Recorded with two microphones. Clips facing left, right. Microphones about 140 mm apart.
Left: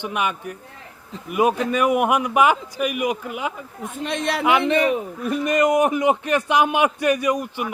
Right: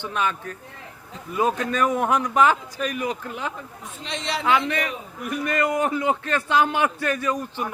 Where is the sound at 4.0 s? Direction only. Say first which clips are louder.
Left 5 dB; 55° left (ahead or behind).